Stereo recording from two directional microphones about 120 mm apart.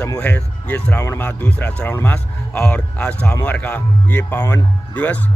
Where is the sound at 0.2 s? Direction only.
15° left (ahead or behind).